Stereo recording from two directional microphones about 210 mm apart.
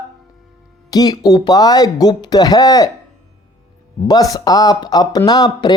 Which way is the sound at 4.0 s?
20° left (ahead or behind).